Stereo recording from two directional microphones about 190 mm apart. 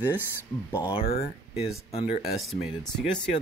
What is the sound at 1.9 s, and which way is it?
Speech, 30° left (ahead or behind).